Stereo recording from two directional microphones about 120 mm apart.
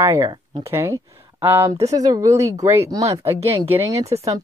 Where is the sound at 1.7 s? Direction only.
30° right (ahead or behind).